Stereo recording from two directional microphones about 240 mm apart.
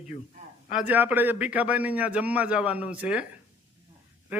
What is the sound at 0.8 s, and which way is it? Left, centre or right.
A man's voice, centre.